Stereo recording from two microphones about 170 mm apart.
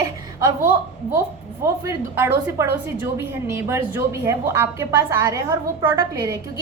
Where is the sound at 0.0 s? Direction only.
20° right (ahead or behind).